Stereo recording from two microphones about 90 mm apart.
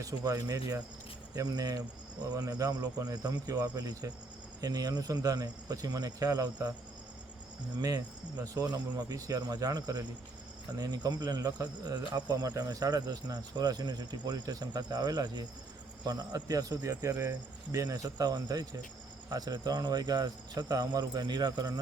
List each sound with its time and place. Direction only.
0.0 s cricket: 40° right (ahead or behind)
1.4 s speech: 40° right (ahead or behind)
2.3 s cricket: 40° right (ahead or behind)
4.6 s speech: 45° right (ahead or behind)
7.8 s cricket: 40° right (ahead or behind)
10.8 s speech: 45° right (ahead or behind)
16.0 s cricket: 40° right (ahead or behind)
19.3 s speech: 45° right (ahead or behind)